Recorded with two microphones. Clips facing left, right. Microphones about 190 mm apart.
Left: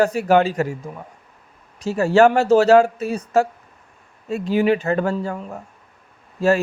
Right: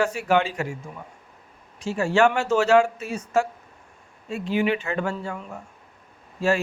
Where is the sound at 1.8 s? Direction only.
40° left (ahead or behind).